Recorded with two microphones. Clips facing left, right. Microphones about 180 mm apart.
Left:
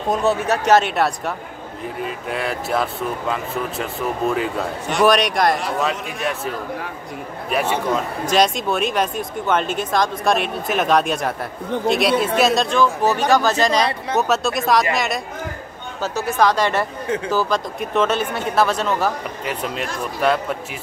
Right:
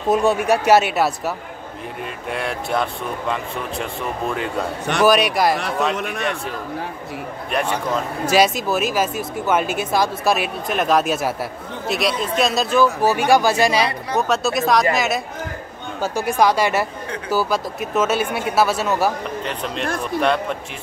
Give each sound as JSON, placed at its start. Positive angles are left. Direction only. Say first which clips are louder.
{"t": 0.1, "sound": "speech", "louder": "right 2 dB", "side_deg": -10}
{"t": 5.9, "sound": "speech", "louder": "right 4 dB", "side_deg": -65}
{"t": 7.5, "sound": "speech", "louder": "left 2 dB", "side_deg": 5}
{"t": 14.1, "sound": "speech", "louder": "even", "side_deg": 0}
{"t": 16.0, "sound": "speech", "louder": "right 1 dB", "side_deg": -10}
{"t": 19.4, "sound": "speech", "louder": "left 3 dB", "side_deg": 5}